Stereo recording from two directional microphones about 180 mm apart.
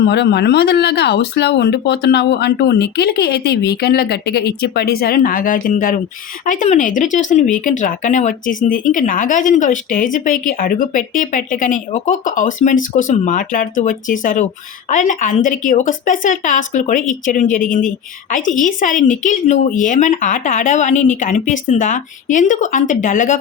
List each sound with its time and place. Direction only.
0.0 s a woman's voice: 70° left (ahead or behind); by 23.4 s 45° left (ahead or behind)